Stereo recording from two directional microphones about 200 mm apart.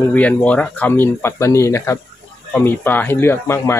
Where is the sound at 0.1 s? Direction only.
5° left (ahead or behind).